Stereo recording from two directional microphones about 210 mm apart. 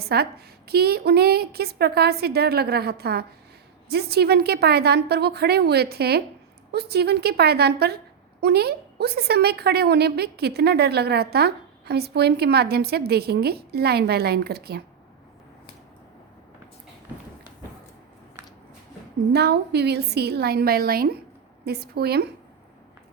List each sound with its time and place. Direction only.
0.0 s a woman's voice: 50° right (ahead or behind)
19.3 s a woman's voice: 50° right (ahead or behind)